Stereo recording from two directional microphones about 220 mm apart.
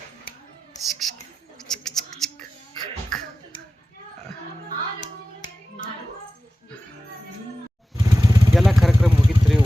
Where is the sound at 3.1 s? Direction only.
Centre (ahead or behind).